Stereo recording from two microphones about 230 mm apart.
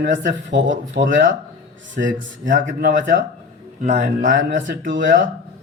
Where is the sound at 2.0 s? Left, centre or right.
Right.